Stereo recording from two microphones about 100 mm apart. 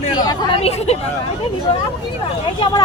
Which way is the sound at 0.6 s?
90° left.